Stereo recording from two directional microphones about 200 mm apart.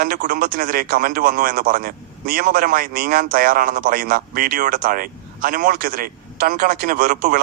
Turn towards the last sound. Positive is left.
turn(degrees=-45)  # may be behind; listen again after turning